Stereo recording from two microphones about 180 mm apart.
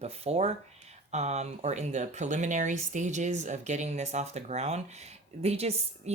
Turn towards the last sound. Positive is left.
turn(degrees=-35)  # may be behind; listen again after turning